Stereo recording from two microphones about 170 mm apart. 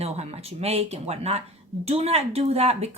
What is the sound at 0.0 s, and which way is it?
Speech, 40° right (ahead or behind).